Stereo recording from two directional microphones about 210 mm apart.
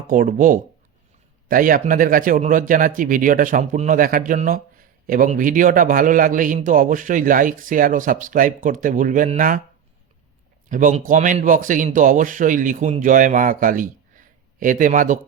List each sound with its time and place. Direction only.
0.1 s speech: 40° right (ahead or behind)
10.7 s speech: 40° right (ahead or behind)